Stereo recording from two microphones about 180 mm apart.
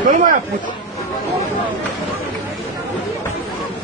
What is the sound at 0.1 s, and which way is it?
Speech, 45° right (ahead or behind).